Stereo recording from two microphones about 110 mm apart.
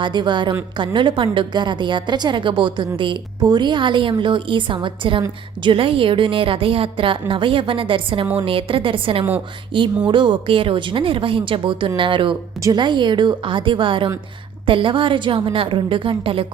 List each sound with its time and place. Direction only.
0.0 s a woman's voice: 45° right (ahead or behind)